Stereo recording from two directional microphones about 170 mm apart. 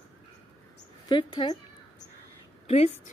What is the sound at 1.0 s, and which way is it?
Speech, 25° left (ahead or behind).